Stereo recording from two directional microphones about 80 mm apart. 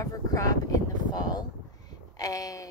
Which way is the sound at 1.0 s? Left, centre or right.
Left.